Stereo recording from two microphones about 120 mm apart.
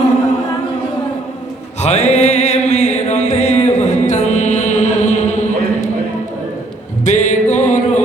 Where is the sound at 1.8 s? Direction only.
65° left (ahead or behind).